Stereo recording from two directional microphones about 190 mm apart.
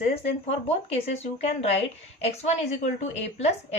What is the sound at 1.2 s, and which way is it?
A woman's voice, 35° left (ahead or behind).